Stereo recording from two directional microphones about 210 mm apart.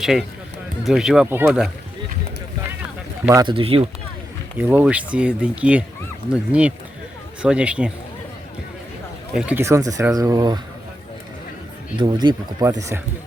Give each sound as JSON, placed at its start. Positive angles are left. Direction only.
{"t": 0.0, "sound": "speech", "side_deg": 0}
{"t": 3.4, "sound": "speech", "side_deg": -25}
{"t": 4.5, "sound": "speech", "side_deg": -10}
{"t": 9.3, "sound": "speech", "side_deg": -5}
{"t": 11.9, "sound": "speech", "side_deg": -20}